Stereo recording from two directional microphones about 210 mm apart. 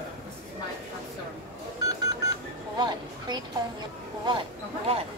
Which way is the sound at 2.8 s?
20° right (ahead or behind).